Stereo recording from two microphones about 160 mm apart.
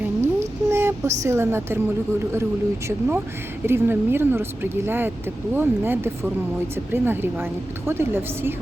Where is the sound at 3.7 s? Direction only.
15° right (ahead or behind).